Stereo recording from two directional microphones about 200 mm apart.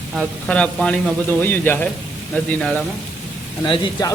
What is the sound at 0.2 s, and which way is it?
Speech, 5° left (ahead or behind).